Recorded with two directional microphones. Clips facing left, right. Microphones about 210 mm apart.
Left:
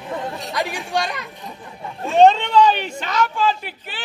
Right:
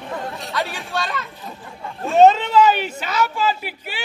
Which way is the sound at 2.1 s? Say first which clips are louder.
Even; 5° right (ahead or behind).